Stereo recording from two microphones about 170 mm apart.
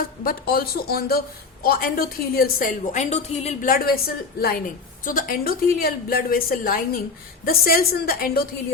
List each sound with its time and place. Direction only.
0.3 s a woman's voice: 65° left (ahead or behind); by 3.7 s 40° left (ahead or behind)
3.7 s a woman's voice: 60° left (ahead or behind)